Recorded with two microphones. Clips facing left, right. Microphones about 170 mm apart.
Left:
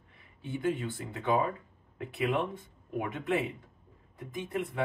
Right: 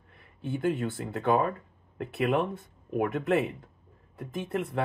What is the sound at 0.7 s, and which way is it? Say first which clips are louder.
Speech: right 3 dB; 55° right (ahead or behind).